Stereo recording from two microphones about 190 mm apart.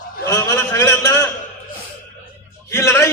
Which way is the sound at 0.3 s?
15° left (ahead or behind).